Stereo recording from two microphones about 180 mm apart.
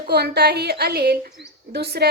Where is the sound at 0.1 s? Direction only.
65° right (ahead or behind).